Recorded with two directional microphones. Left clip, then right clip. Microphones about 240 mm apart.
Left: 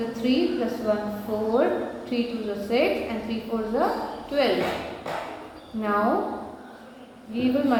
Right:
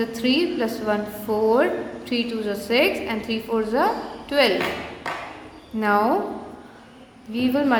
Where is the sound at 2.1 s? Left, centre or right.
Right.